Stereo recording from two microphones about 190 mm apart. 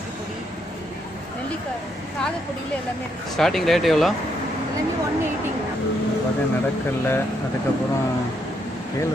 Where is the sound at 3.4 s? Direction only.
Centre (ahead or behind).